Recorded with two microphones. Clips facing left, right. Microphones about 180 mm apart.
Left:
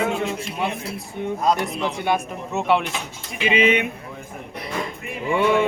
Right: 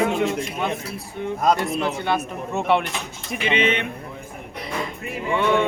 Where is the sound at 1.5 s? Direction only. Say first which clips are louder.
Right 1 dB; 20° left (ahead or behind).